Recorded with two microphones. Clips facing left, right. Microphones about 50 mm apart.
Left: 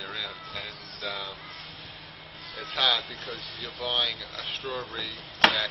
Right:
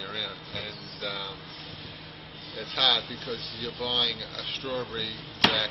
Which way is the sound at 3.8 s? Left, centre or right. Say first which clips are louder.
Even; centre.